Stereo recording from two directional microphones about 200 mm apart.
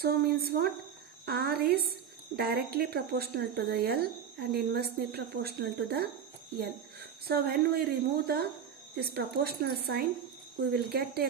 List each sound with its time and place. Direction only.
0.0 s a woman's voice: 50° right (ahead or behind)
7.3 s a woman's voice: 50° right (ahead or behind)